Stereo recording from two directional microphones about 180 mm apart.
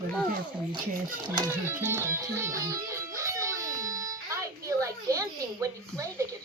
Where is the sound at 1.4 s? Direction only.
10° right (ahead or behind).